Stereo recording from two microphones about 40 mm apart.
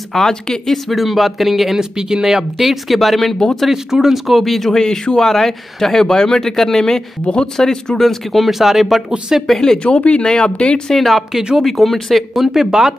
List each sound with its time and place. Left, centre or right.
0.1 s speech: centre
0.7 s speech: centre
1.8 s speech: centre
3.7 s speech: centre
9.6 s speech: centre
9.9 s speech: left
10.9 s speech: centre
12.5 s speech: centre